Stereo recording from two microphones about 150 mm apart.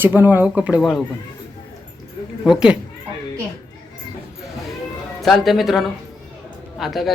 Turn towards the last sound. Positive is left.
turn(degrees=0)  # may be behind; listen again after turning